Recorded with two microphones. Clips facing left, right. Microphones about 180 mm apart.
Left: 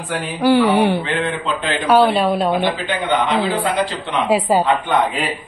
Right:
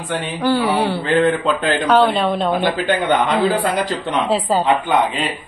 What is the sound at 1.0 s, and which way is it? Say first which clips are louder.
Speech: right 6 dB; 40° right (ahead or behind).